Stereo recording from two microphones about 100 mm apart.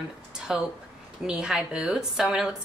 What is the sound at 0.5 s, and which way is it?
A woman's voice, 5° right (ahead or behind).